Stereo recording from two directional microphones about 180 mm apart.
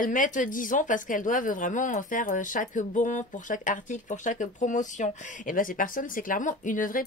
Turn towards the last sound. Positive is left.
turn(degrees=50)  # may be behind; listen again after turning